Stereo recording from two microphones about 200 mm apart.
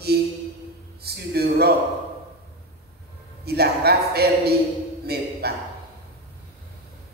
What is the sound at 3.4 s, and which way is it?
A man's voice, 50° right (ahead or behind).